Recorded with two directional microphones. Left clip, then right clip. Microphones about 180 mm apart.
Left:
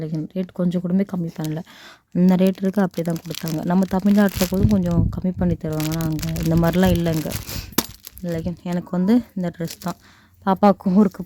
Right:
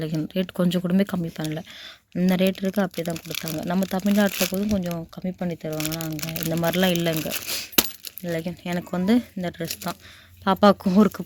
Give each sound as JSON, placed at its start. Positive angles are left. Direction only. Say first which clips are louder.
{"t": 0.0, "sound": "speech", "louder": "right 1 dB", "side_deg": 10}
{"t": 7.8, "sound": "a sound", "louder": "right 1 dB", "side_deg": 20}
{"t": 8.9, "sound": "speech", "louder": "left 3 dB", "side_deg": 25}